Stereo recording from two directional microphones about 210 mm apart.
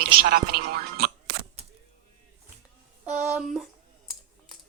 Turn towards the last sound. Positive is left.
turn(degrees=0)  # may be behind; listen again after turning